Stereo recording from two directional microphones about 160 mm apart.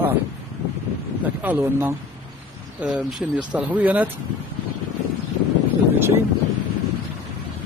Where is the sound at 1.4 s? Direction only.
15° right (ahead or behind).